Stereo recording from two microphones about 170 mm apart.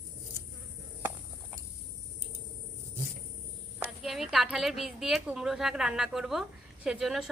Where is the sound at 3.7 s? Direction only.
Centre (ahead or behind).